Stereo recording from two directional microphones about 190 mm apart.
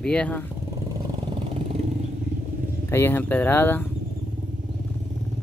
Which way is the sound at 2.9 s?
10° left (ahead or behind).